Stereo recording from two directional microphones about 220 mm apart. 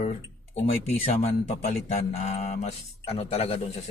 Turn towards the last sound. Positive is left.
turn(degrees=30)  # may be behind; listen again after turning